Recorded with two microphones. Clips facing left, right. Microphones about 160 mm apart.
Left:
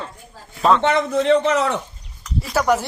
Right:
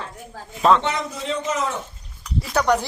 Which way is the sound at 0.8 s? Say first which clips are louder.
Left 8 dB; 60° left (ahead or behind).